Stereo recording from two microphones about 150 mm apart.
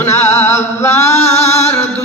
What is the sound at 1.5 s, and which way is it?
Music, 20° left (ahead or behind).